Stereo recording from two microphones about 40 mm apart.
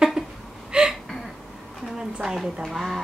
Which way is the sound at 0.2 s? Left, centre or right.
Right.